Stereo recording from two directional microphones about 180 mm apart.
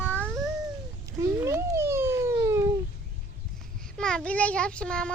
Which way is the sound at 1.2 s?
15° right (ahead or behind).